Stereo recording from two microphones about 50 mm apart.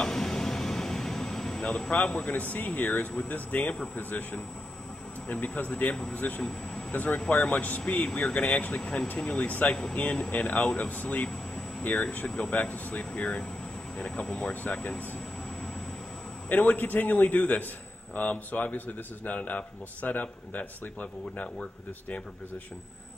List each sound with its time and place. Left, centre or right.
0.0 s air conditioning: centre
1.6 s speech: left
6.4 s a sound: centre
6.9 s speech: left
16.4 s speech: left